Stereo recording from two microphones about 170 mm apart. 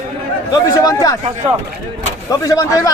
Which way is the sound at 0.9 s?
20° left (ahead or behind).